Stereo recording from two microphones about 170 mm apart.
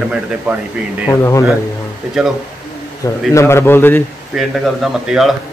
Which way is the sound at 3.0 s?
15° left (ahead or behind).